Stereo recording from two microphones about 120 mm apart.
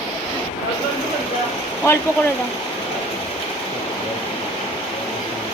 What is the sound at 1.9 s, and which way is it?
Speech, 25° left (ahead or behind).